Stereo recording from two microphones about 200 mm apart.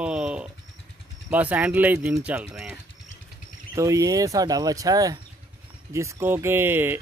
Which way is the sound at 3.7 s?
15° right (ahead or behind).